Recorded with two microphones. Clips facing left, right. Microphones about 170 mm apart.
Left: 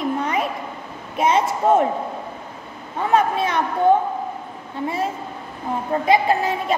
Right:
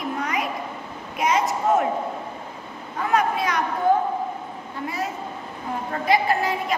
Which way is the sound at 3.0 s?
25° left (ahead or behind).